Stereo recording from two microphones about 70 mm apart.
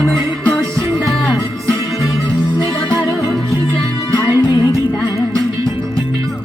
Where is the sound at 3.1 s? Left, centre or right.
Left.